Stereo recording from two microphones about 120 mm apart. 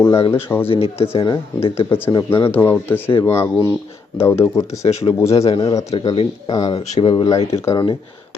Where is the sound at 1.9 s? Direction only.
20° left (ahead or behind).